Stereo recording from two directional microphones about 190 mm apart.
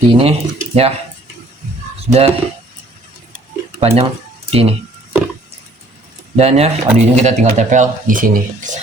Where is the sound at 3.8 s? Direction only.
30° right (ahead or behind).